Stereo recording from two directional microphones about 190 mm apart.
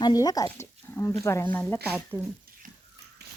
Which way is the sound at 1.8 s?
5° right (ahead or behind).